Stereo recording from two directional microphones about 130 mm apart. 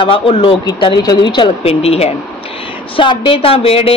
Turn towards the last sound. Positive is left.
turn(degrees=50)  # may be behind; listen again after turning